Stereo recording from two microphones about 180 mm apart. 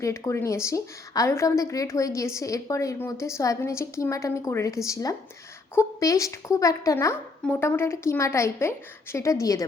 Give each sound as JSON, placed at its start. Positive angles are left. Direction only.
{"t": 0.0, "sound": "a woman's voice", "side_deg": 15}